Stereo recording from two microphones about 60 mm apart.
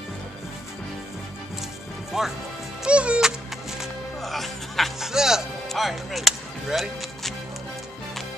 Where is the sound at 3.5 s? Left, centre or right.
Centre.